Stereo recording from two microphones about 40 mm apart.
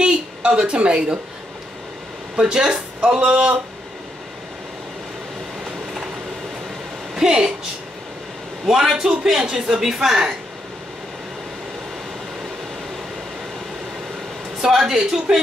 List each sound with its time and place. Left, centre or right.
0.0 s a sound: right
2.3 s speech: centre
7.2 s a man's voice: centre
8.6 s a man's voice: centre
14.6 s a man's voice: centre